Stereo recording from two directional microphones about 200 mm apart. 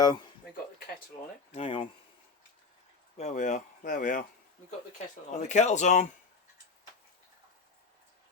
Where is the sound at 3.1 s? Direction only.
35° left (ahead or behind).